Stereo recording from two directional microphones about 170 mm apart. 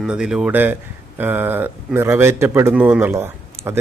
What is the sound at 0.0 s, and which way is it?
Speech, 5° right (ahead or behind).